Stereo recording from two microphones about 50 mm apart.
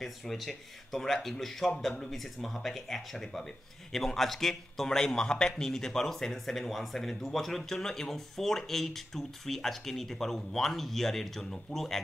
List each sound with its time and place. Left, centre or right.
0.0 s speech: centre